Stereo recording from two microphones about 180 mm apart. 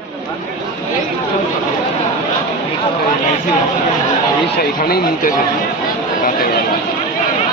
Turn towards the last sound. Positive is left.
turn(degrees=55)  # may be behind; listen again after turning